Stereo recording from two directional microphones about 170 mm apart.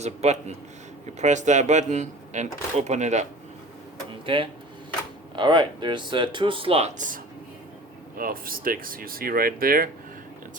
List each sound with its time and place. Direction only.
0.0 s a man's voice: 40° right (ahead or behind)
4.3 s a man's voice: 30° right (ahead or behind)
8.2 s speech: 55° right (ahead or behind)